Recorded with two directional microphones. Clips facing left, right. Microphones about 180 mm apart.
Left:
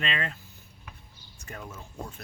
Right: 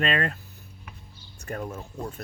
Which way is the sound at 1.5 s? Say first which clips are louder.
Right 9 dB; 50° right (ahead or behind).